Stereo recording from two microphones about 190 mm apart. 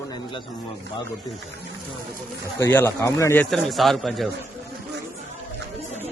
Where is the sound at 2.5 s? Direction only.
10° left (ahead or behind).